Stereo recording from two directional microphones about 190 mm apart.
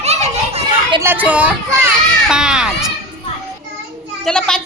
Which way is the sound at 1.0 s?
10° right (ahead or behind).